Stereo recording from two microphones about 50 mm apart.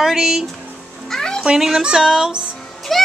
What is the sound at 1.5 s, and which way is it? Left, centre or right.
Speech, centre.